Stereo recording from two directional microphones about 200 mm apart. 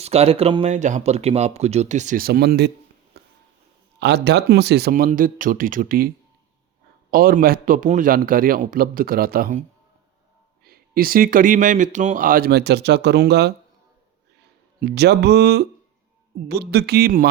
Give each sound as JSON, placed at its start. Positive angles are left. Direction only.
{"t": 0.0, "sound": "speech", "side_deg": -30}
{"t": 3.1, "sound": "a sound", "side_deg": -60}
{"t": 4.0, "sound": "speech", "side_deg": -60}
{"t": 7.1, "sound": "speech", "side_deg": -45}
{"t": 14.8, "sound": "speech", "side_deg": -55}